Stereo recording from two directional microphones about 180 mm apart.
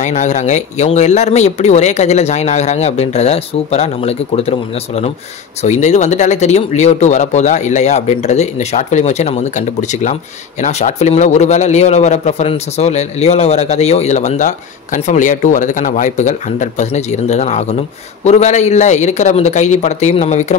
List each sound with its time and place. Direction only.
0.0 s a man's voice: 40° left (ahead or behind)